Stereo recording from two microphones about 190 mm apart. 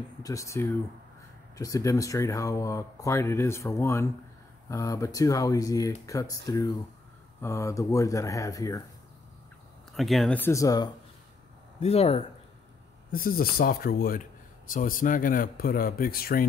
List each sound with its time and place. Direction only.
0.2 s speech: 15° left (ahead or behind)
9.9 s speech: centre (ahead or behind); by 10.9 s 20° left (ahead or behind)
11.8 s speech: 35° left (ahead or behind)
13.1 s speech: 50° left (ahead or behind)